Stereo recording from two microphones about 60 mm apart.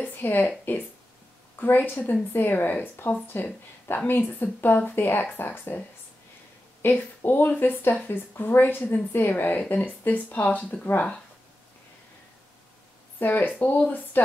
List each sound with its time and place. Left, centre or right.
0.0 s a sound: left
0.7 s speech: left
6.8 s speech: left
13.2 s speech: left